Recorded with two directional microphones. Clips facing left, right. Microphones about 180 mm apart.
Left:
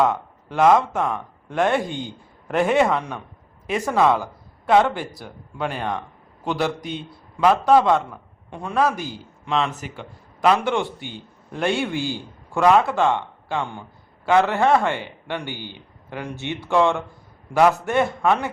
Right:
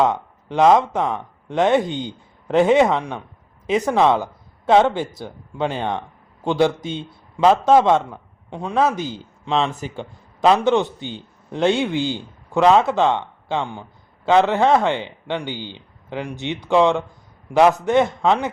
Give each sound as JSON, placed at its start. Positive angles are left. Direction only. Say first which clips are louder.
{"t": 0.0, "sound": "speech", "louder": "right 1 dB", "side_deg": -20}